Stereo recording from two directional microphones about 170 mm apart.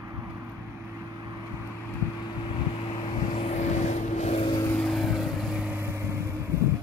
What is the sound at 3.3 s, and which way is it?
Vehicle, 45° left (ahead or behind).